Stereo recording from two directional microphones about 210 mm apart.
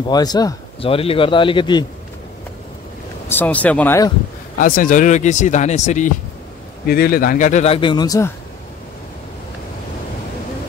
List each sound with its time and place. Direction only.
0.1 s a man's voice: 20° left (ahead or behind)
3.3 s speech: 10° left (ahead or behind)
4.6 s speech: 45° left (ahead or behind)
6.9 s speech: 45° left (ahead or behind); by 8.3 s 20° left (ahead or behind)